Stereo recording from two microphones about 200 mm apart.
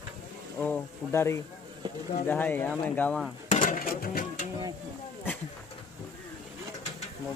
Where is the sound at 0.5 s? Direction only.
10° left (ahead or behind).